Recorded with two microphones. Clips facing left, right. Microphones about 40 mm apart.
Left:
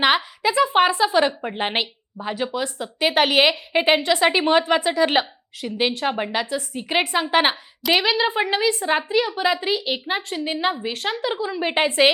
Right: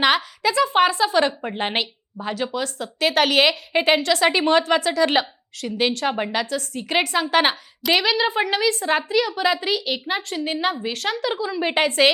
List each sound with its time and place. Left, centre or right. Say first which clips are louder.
0.0 s a woman's voice: even; centre
10.6 s a woman's voice: even; centre